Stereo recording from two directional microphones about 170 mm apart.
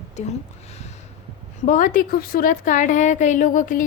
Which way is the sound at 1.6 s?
50° left (ahead or behind).